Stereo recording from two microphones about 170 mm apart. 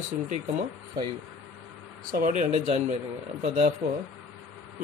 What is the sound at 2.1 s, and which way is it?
Speech, 50° right (ahead or behind).